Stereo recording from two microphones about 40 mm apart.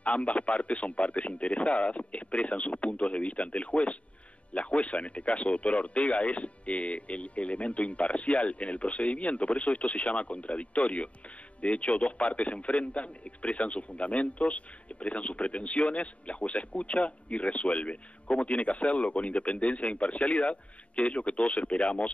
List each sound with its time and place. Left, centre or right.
0.0 s speech: left